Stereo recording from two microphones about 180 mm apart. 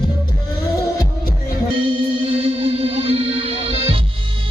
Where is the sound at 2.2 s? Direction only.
30° right (ahead or behind).